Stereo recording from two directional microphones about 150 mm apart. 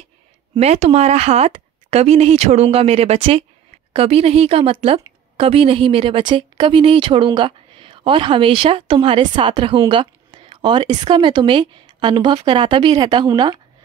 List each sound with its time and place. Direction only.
0.6 s a woman's voice: 45° right (ahead or behind); by 13.6 s 30° right (ahead or behind)